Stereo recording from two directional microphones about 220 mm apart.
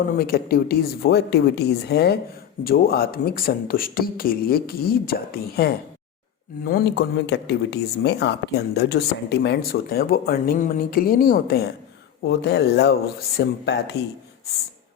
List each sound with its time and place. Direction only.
0.2 s speech: 45° left (ahead or behind)